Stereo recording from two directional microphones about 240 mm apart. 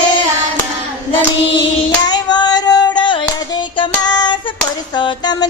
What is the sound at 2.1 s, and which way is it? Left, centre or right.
Singing, centre.